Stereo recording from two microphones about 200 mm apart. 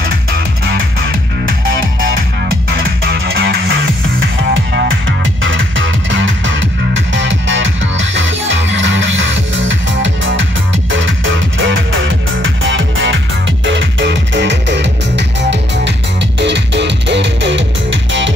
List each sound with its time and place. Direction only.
2.7 s music: 50° right (ahead or behind)
3.3 s music: 70° right (ahead or behind)
16.3 s music: 60° right (ahead or behind)